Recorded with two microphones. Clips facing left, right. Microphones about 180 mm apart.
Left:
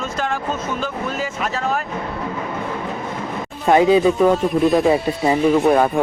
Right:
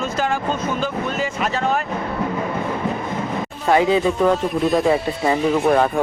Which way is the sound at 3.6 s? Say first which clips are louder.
Left 3 dB; 20° left (ahead or behind).